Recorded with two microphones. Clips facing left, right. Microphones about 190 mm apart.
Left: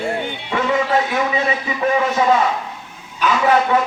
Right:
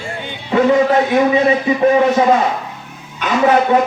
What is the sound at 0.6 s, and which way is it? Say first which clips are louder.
A man's voice: right 6 dB; 35° right (ahead or behind).